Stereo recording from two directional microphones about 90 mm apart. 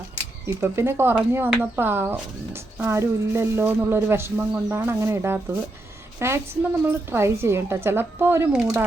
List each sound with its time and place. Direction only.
0.4 s speech: 30° right (ahead or behind)